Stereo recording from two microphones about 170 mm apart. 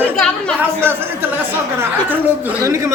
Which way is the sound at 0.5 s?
10° right (ahead or behind).